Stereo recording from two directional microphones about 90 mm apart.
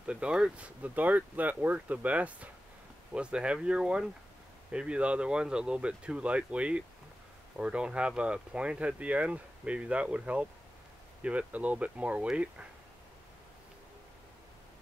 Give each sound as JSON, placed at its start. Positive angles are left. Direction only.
{"t": 0.0, "sound": "speech", "side_deg": -10}